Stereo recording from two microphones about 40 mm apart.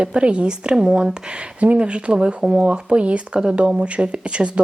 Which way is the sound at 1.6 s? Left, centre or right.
Right.